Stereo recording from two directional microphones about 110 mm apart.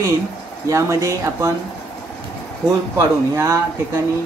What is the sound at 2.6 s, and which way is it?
Speech, 30° right (ahead or behind).